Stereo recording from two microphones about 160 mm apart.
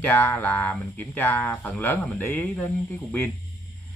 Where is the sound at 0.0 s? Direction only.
10° left (ahead or behind).